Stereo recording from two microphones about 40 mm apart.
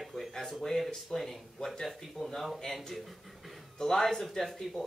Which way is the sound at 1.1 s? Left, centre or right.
Centre.